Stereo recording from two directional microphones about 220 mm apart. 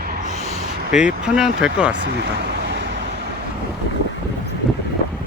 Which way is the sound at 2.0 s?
50° right (ahead or behind).